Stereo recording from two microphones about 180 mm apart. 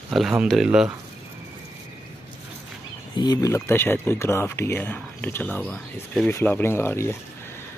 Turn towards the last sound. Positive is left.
turn(degrees=15)  # may be behind; listen again after turning